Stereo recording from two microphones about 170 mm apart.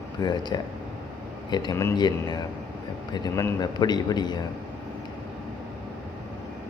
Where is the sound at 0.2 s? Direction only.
25° left (ahead or behind).